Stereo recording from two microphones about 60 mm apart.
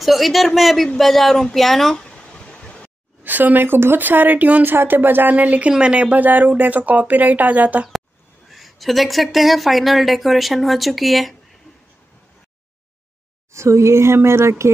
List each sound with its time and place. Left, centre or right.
0.0 s speech: centre
2.0 s a sound: centre
3.3 s speech: right
8.5 s speech: centre
13.5 s speech: right